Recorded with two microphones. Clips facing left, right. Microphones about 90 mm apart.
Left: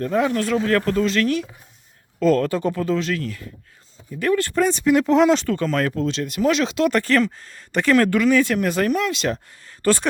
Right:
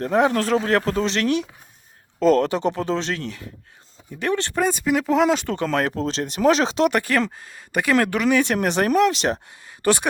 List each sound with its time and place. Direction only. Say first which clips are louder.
0.0 s speech: right 1 dB; 30° right (ahead or behind)
4.6 s speech: left 3 dB; 5° right (ahead or behind)
5.6 s speech: left 1 dB; 30° right (ahead or behind)
6.8 s speech: left 4 dB; 15° right (ahead or behind); by 9.4 s 30° right (ahead or behind)
9.6 s a sound: left 1 dB; 15° right (ahead or behind)